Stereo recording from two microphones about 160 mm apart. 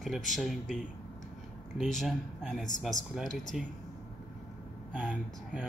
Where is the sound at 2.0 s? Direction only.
Centre (ahead or behind).